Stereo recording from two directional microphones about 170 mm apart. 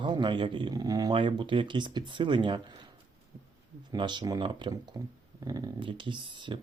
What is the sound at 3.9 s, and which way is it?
Speech, 25° right (ahead or behind).